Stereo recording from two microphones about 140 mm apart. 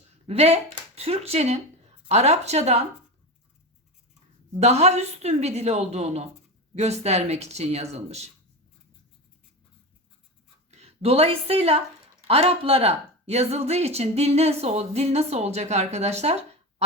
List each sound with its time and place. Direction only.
0.3 s a woman's voice: 45° right (ahead or behind)
4.6 s a woman's voice: 50° right (ahead or behind)
10.7 s a woman's voice: 50° right (ahead or behind)